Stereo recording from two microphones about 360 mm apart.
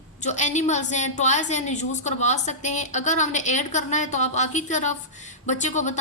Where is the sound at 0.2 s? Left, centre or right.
Centre.